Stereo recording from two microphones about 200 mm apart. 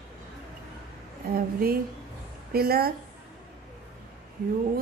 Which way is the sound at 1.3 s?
45° right (ahead or behind).